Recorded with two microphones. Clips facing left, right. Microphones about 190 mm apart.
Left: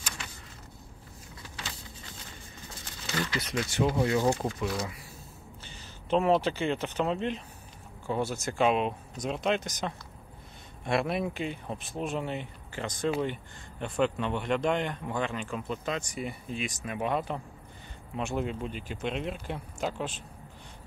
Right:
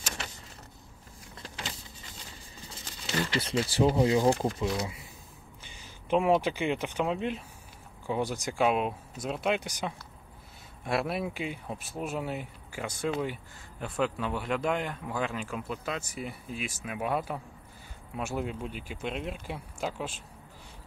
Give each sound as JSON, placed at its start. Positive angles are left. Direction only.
{"t": 3.1, "sound": "speech", "side_deg": -30}